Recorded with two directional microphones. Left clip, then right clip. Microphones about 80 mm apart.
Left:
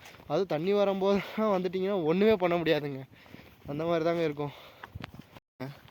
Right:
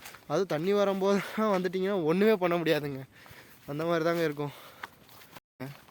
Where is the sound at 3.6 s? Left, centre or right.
Right.